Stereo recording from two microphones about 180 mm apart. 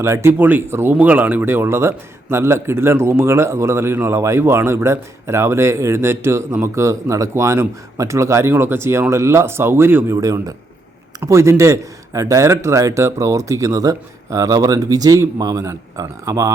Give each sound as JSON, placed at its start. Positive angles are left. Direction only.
{"t": 0.0, "sound": "speech", "side_deg": -15}